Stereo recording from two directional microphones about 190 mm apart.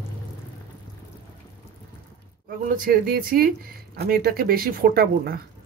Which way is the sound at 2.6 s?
50° right (ahead or behind).